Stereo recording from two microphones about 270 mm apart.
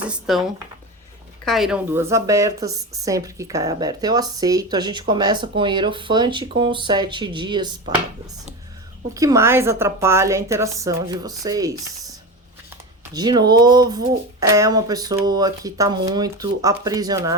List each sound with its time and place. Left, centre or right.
0.0 s speech: centre
1.5 s speech: centre
9.1 s speech: centre
13.1 s speech: centre